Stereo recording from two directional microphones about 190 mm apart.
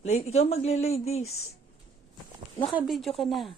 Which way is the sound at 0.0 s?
35° left (ahead or behind).